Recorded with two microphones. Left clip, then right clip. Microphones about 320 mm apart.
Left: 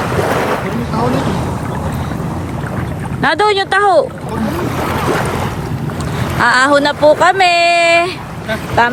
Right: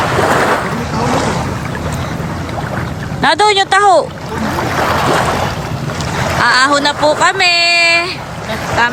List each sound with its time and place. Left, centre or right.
0.0 s boat: right
3.2 s speech: centre
4.8 s boat: right
6.4 s speech: centre